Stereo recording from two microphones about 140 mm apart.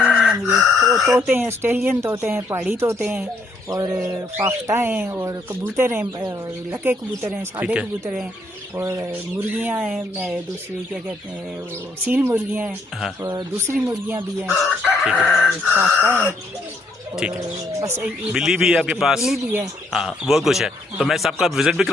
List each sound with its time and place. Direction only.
0.0 s chicken: 5° right (ahead or behind)
1.1 s speech: 15° right (ahead or behind)
8.7 s speech: 20° right (ahead or behind)
12.0 s speech: 15° right (ahead or behind)
14.8 s speech: centre (ahead or behind)
15.7 s speech: 15° right (ahead or behind)
17.7 s speech: 20° right (ahead or behind)
18.0 s speech: 5° right (ahead or behind)